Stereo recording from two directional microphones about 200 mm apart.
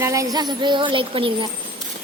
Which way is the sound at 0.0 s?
15° right (ahead or behind).